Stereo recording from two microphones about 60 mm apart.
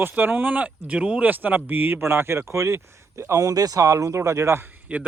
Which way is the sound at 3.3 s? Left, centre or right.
Right.